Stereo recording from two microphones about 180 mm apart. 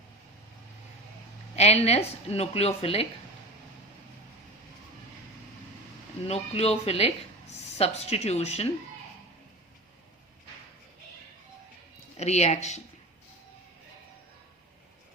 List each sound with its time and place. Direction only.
1.5 s speech: 35° left (ahead or behind)
6.2 s speech: 35° left (ahead or behind)
12.1 s speech: 40° left (ahead or behind)